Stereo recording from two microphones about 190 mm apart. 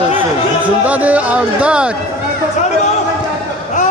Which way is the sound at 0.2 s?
10° right (ahead or behind).